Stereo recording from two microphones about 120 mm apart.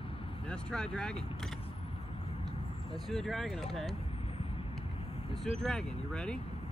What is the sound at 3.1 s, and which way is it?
Speech, centre (ahead or behind).